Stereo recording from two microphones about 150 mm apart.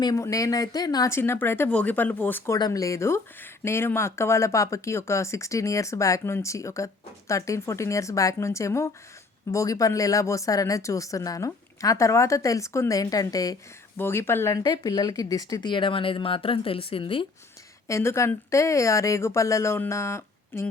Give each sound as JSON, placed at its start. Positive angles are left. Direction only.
{"t": 0.0, "sound": "speech", "side_deg": 25}
{"t": 2.6, "sound": "speech", "side_deg": 25}
{"t": 17.8, "sound": "speech", "side_deg": 20}